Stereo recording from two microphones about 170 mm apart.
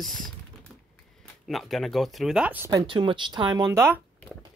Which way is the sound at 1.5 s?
Centre (ahead or behind).